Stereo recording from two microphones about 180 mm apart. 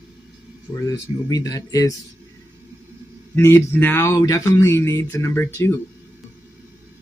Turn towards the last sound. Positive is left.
turn(degrees=15)  # may be behind; listen again after turning